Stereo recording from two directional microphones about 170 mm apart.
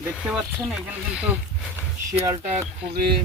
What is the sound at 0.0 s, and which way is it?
Speech, 10° right (ahead or behind).